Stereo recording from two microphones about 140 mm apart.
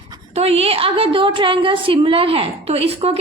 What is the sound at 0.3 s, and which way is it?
A woman's voice, 45° right (ahead or behind).